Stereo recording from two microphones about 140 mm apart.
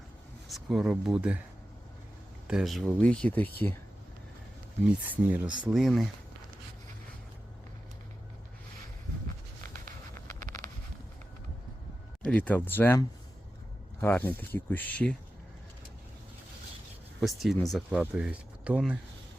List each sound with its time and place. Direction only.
0.4 s speech: centre (ahead or behind)
2.5 s speech: 5° right (ahead or behind)
5.0 s speech: 10° right (ahead or behind)
10.4 s a sound: 70° right (ahead or behind)
12.2 s speech: 10° left (ahead or behind)
14.0 s speech: 15° left (ahead or behind)
17.2 s speech: centre (ahead or behind)